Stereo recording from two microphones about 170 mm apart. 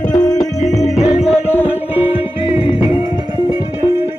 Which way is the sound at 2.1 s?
35° left (ahead or behind).